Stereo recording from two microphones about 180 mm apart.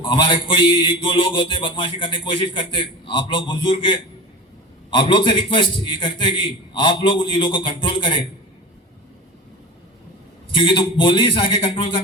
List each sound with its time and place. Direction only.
0.0 s a man's voice: 25° left (ahead or behind)
10.5 s a man's voice: 25° left (ahead or behind)